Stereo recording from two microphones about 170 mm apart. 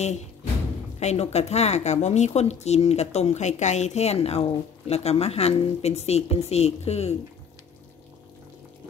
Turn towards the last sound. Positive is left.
turn(degrees=40)  # may be behind; listen again after turning